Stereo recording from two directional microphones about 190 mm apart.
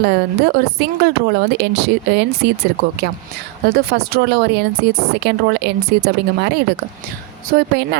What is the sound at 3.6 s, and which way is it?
A woman's voice, 55° right (ahead or behind).